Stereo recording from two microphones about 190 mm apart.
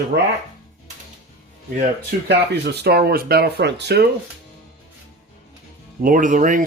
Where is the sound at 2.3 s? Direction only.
60° right (ahead or behind).